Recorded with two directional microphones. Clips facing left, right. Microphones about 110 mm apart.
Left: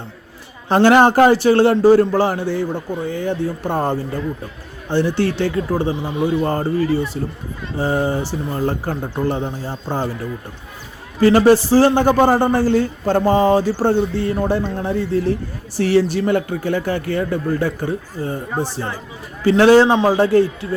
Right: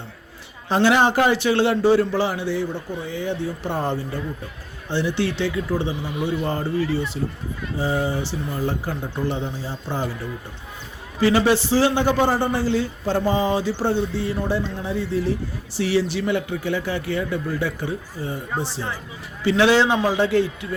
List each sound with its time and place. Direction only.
0.7 s a man's voice: 50° left (ahead or behind)
11.2 s a man's voice: 45° left (ahead or behind)
19.5 s a man's voice: 45° left (ahead or behind)